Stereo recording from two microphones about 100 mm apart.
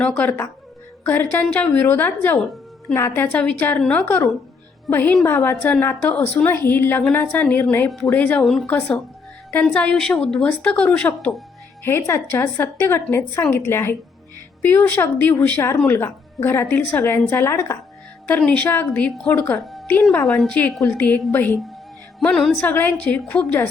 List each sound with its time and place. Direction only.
0.0 s a woman's voice: 15° left (ahead or behind)
5.5 s speech: 10° left (ahead or behind)
5.8 s a woman's voice: 20° left (ahead or behind)
8.1 s speech: 15° left (ahead or behind)
11.8 s a woman's voice: 25° left (ahead or behind)
18.3 s speech: 15° left (ahead or behind)
19.6 s music: centre (ahead or behind)
20.8 s speech: 20° left (ahead or behind)
22.2 s speech: 10° left (ahead or behind)
22.6 s speech: 20° left (ahead or behind)